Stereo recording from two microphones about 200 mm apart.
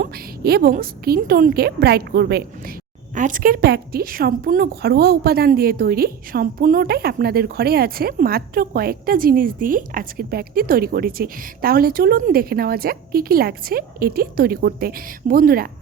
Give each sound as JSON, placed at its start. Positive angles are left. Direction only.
{"t": 0.0, "sound": "a woman's voice", "side_deg": -50}